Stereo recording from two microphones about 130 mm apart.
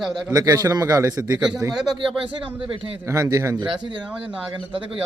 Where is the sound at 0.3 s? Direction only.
30° right (ahead or behind).